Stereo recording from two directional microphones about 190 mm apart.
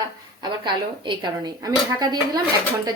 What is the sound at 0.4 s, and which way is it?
A woman's voice, 25° right (ahead or behind).